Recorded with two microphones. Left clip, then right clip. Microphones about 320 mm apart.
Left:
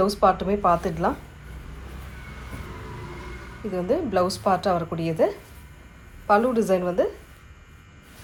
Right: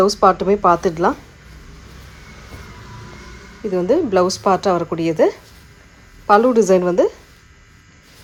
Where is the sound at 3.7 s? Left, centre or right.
Right.